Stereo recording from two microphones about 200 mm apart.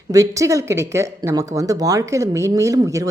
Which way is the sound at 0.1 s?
15° right (ahead or behind).